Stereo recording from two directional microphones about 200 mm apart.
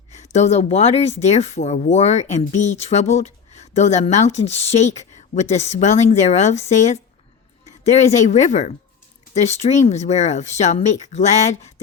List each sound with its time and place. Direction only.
0.1 s speech: 35° left (ahead or behind)